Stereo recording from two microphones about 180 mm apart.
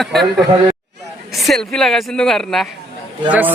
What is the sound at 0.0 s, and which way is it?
Speech, centre (ahead or behind).